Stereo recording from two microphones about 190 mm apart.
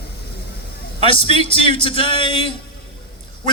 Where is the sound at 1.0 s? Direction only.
30° left (ahead or behind).